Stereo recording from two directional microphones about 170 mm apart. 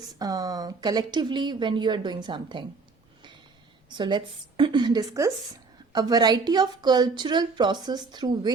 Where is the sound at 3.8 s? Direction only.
25° right (ahead or behind).